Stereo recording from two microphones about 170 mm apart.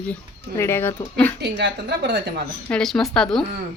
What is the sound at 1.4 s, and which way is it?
Speech, 85° right.